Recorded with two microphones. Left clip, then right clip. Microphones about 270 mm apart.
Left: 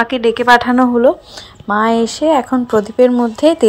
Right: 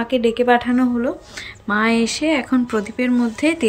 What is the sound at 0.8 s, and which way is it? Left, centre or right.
Speech, left.